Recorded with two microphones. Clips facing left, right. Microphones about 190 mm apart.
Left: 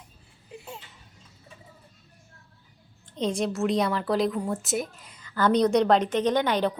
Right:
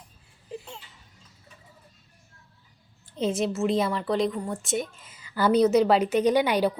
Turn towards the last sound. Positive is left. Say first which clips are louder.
# right 2 dB
turn(degrees=-10)  # may be behind; listen again after turning